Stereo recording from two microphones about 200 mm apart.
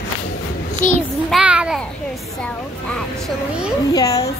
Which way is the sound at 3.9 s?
15° left (ahead or behind).